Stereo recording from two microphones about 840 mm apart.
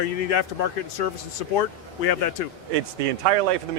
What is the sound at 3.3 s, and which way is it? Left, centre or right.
Speech, right.